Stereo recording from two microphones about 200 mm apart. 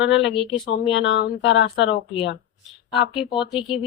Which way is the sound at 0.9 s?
70° left (ahead or behind).